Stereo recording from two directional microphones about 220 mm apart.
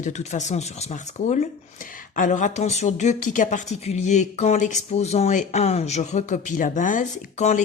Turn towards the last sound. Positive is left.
turn(degrees=30)  # may be behind; listen again after turning